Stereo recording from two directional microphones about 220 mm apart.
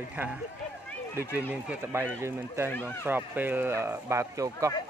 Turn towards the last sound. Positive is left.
turn(degrees=-15)  # may be behind; listen again after turning